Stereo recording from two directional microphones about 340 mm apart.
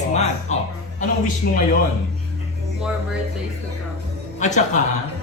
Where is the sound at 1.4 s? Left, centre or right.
Left.